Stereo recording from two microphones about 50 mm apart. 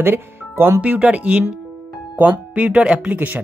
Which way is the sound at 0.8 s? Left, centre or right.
Right.